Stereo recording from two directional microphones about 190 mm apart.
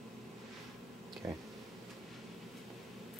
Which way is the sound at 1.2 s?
15° right (ahead or behind).